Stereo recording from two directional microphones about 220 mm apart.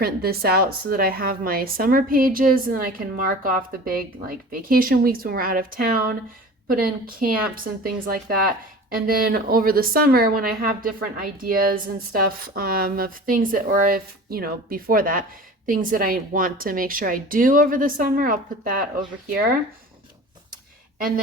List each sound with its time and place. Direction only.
0.0 s a woman's voice: 45° right (ahead or behind)